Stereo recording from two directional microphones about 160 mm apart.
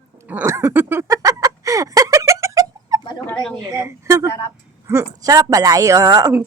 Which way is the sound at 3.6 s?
20° right (ahead or behind).